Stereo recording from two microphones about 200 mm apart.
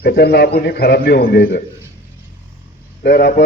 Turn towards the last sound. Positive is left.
turn(degrees=50)  # may be behind; listen again after turning